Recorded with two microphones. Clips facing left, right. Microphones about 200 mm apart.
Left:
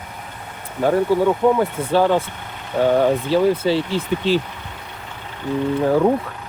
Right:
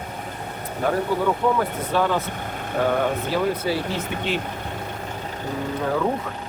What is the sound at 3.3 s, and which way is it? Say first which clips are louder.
Speech: left 6 dB; 25° left (ahead or behind).